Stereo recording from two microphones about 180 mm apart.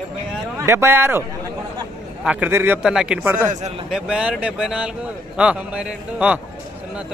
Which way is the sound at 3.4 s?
40° right (ahead or behind).